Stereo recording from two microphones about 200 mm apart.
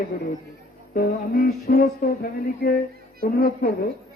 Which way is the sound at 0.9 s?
50° left (ahead or behind).